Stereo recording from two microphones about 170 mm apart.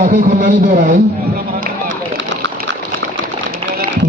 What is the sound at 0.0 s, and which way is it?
Speech, 50° right (ahead or behind).